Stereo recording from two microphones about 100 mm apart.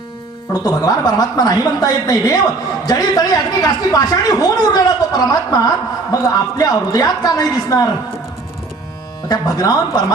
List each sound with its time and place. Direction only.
0.5 s a woman's voice: 40° left (ahead or behind)
9.3 s a woman's voice: 40° left (ahead or behind)